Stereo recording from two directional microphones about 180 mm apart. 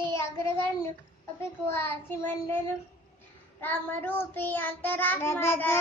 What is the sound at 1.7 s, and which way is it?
Child singing, 15° left (ahead or behind).